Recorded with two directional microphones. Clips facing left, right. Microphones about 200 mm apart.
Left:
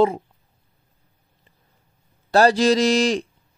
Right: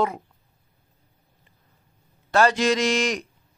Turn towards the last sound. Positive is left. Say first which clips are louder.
# left 5 dB
turn(degrees=30)  # may be behind; listen again after turning